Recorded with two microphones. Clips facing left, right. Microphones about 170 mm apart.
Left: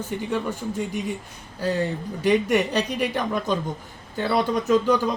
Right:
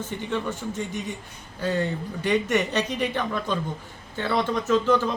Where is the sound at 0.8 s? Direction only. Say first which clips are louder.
Left 3 dB; 10° left (ahead or behind).